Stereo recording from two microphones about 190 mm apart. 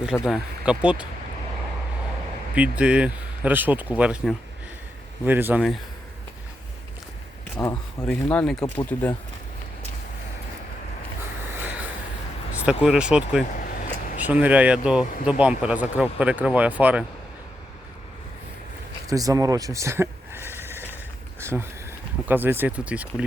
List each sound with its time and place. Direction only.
0.0 s speech: centre (ahead or behind)
2.6 s speech: 5° right (ahead or behind)
7.5 s speech: 15° left (ahead or behind)
11.5 s a sound: 10° right (ahead or behind)
12.5 s speech: 5° right (ahead or behind)
13.6 s vehicle: 45° left (ahead or behind)
14.2 s speech: 10° right (ahead or behind)
19.0 s a sound: 20° right (ahead or behind)
21.4 s speech: 10° right (ahead or behind)